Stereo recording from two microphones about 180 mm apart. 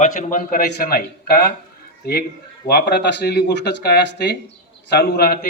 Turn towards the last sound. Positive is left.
turn(degrees=60)  # may be behind; listen again after turning